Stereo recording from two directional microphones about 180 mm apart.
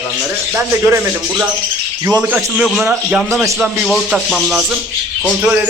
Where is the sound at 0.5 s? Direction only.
10° right (ahead or behind).